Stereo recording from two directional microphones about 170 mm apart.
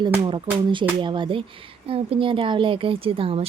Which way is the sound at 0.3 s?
30° right (ahead or behind).